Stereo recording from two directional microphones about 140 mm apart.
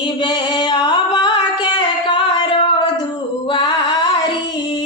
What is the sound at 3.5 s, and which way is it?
Mantra, 35° left (ahead or behind).